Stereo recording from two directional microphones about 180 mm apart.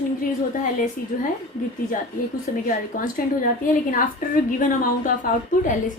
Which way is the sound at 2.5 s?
45° left (ahead or behind).